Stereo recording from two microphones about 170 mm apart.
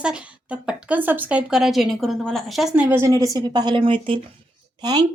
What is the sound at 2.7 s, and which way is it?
Speech, 10° right (ahead or behind).